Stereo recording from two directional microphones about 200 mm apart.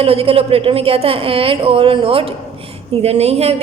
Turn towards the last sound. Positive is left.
turn(degrees=-30)  # may be behind; listen again after turning